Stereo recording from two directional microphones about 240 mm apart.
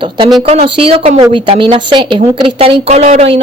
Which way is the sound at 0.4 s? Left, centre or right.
Right.